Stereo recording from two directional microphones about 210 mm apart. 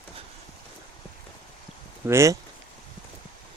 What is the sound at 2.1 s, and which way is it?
Speech, 15° right (ahead or behind).